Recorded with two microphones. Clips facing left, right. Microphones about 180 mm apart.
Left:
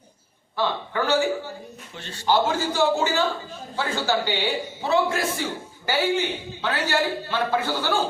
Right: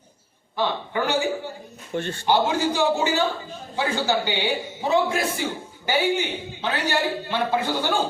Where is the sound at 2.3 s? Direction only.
15° right (ahead or behind).